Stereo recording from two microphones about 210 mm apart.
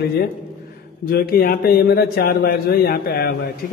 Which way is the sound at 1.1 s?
45° left (ahead or behind).